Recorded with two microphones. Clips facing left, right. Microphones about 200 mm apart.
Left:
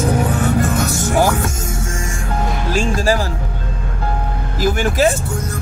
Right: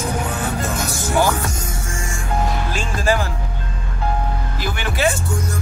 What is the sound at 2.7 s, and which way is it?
Speech, 40° left (ahead or behind).